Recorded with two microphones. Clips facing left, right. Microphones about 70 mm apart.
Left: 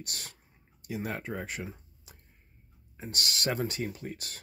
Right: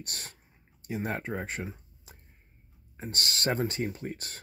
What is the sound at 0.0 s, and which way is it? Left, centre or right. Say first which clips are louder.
Speech: right 1 dB; right.